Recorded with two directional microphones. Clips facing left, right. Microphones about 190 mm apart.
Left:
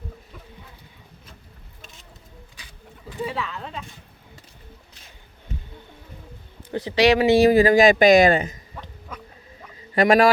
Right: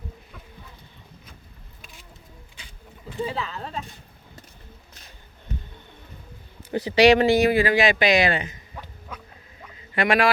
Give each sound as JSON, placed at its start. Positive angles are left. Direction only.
{"t": 3.2, "sound": "speech", "side_deg": -35}
{"t": 6.7, "sound": "speech", "side_deg": -5}
{"t": 7.3, "sound": "speech", "side_deg": 30}
{"t": 9.9, "sound": "speech", "side_deg": 40}